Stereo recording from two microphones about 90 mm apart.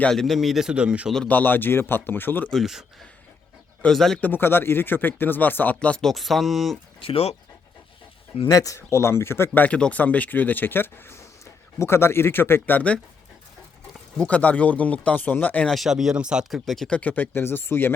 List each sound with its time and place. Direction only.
0.0 s speech: 5° left (ahead or behind); by 1.1 s 10° right (ahead or behind)
1.3 s speech: 20° left (ahead or behind)
2.5 s speech: centre (ahead or behind)
4.2 s speech: 25° left (ahead or behind)
6.0 s speech: centre (ahead or behind)
7.0 s speech: 90° left
8.4 s speech: 40° left (ahead or behind)
9.6 s speech: 15° left (ahead or behind)
14.2 s speech: 15° left (ahead or behind)
15.7 s speech: 5° right (ahead or behind); by 17.9 s 25° left (ahead or behind)